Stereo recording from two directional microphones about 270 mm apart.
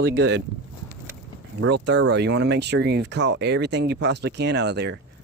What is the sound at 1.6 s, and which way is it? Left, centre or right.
Speech, right.